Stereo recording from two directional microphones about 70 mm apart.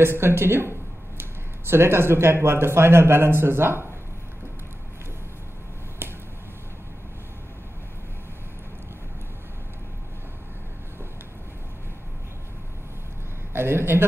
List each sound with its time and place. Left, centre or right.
0.0 s speech: right
13.5 s a man's voice: right